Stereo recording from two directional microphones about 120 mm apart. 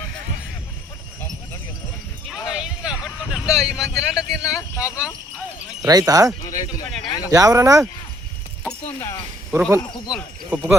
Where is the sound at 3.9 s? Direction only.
25° left (ahead or behind).